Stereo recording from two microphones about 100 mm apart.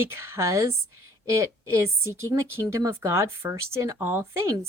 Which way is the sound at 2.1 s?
30° right (ahead or behind).